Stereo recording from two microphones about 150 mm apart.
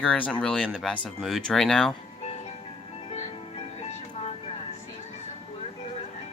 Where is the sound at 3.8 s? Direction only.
45° left (ahead or behind).